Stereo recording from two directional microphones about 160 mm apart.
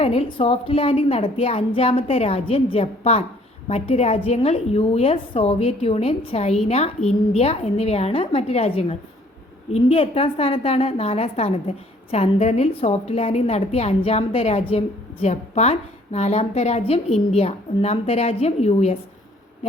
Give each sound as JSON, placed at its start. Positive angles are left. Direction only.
{"t": 0.0, "sound": "a woman's voice", "side_deg": 40}